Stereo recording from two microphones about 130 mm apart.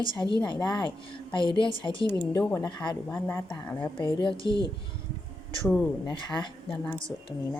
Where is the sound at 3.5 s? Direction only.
35° left (ahead or behind).